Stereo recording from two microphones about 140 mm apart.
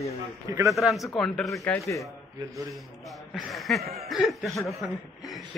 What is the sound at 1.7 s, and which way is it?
Speech, 20° left (ahead or behind).